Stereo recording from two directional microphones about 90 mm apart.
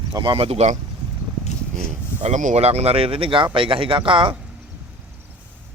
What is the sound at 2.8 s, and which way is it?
Speech, 90° right.